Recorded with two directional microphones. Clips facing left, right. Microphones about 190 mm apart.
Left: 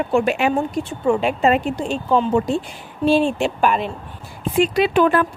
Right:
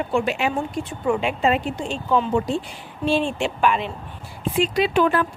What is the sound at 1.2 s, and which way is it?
Speech, 45° left (ahead or behind).